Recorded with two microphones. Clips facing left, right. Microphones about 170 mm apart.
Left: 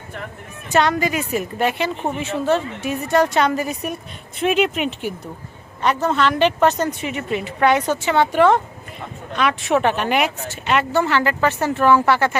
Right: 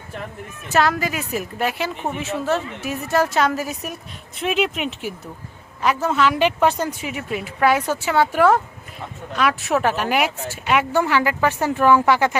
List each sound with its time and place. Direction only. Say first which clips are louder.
0.7 s a woman's voice: left 2 dB; centre (ahead or behind)